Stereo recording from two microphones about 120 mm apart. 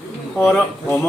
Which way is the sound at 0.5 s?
15° left (ahead or behind).